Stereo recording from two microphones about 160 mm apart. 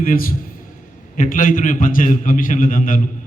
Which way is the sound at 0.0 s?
60° left (ahead or behind).